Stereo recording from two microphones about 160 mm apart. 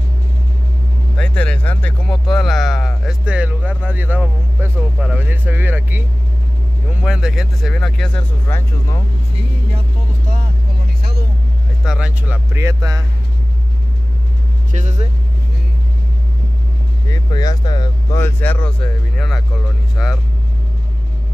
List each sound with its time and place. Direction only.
1.1 s speech: 5° left (ahead or behind)
8.5 s speech: 15° left (ahead or behind)
11.0 s vehicle: 80° right
11.8 s speech: 5° right (ahead or behind)
14.7 s speech: 45° right (ahead or behind)
17.1 s speech: 25° left (ahead or behind)
18.2 s speech: 10° left (ahead or behind)